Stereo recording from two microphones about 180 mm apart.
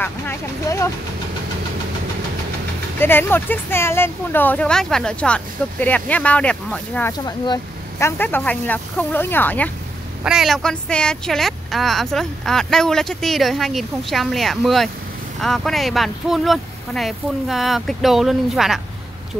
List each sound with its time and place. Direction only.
0.0 s speech: 15° left (ahead or behind)
3.0 s speech: 10° left (ahead or behind)
7.1 s speech: 20° left (ahead or behind)
8.2 s speech: 10° left (ahead or behind)
10.2 s speech: centre (ahead or behind)